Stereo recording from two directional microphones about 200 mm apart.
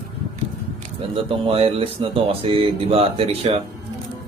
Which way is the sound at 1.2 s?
30° right (ahead or behind).